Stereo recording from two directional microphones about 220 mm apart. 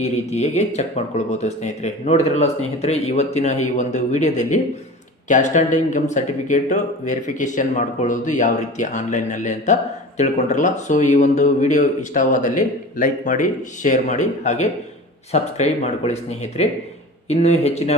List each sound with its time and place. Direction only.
0.0 s speech: 30° left (ahead or behind)